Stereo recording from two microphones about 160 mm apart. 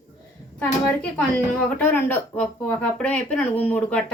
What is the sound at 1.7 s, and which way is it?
Speech, 10° left (ahead or behind).